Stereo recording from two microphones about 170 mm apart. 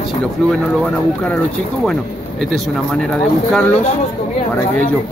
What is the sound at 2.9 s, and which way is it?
Speech, 5° left (ahead or behind).